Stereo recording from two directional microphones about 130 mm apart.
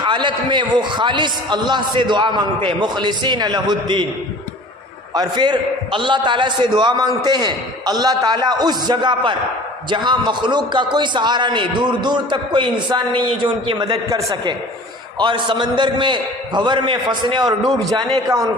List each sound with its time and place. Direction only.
0.0 s a man's voice: 35° right (ahead or behind)
5.1 s a man's voice: 30° right (ahead or behind)
15.2 s a man's voice: 35° right (ahead or behind)